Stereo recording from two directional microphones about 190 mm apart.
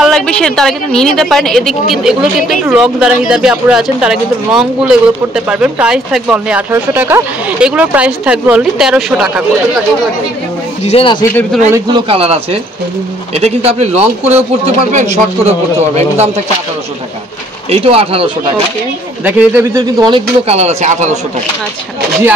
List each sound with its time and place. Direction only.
0.0 s a woman's voice: 5° left (ahead or behind)
10.8 s speech: 30° left (ahead or behind)
11.7 s a man's voice: 25° right (ahead or behind)
17.6 s a man's voice: 30° right (ahead or behind)
19.2 s speech: 10° right (ahead or behind); by 21.2 s 40° right (ahead or behind)